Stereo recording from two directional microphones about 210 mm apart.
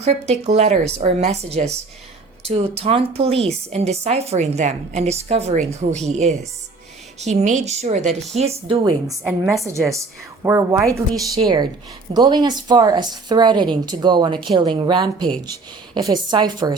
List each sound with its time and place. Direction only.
0.0 s a woman's voice: 30° right (ahead or behind)
9.5 s a woman's voice: 15° right (ahead or behind)